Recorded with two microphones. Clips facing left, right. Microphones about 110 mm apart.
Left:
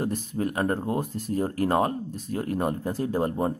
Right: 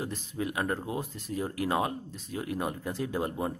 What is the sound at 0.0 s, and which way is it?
Speech, 50° left (ahead or behind).